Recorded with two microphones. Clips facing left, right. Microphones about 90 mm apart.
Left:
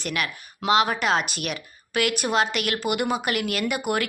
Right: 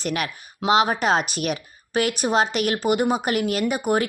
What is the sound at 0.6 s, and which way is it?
Speech, 30° right (ahead or behind).